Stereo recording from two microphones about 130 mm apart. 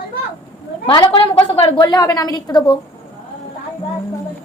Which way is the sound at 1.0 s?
45° left (ahead or behind).